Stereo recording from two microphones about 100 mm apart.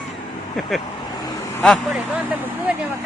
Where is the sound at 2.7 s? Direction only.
15° right (ahead or behind).